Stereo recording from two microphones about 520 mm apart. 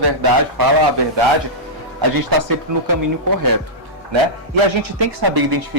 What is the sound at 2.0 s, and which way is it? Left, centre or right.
Speech, right.